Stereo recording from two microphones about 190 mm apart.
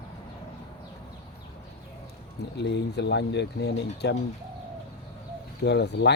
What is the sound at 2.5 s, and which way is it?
Speech, 65° left (ahead or behind).